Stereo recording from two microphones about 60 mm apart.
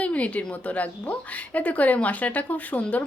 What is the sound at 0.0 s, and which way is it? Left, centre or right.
Speech, left.